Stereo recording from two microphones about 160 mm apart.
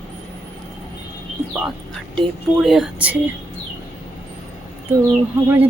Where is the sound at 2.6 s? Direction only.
Centre (ahead or behind).